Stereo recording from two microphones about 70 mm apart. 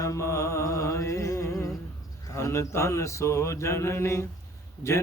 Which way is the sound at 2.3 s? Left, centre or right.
Left.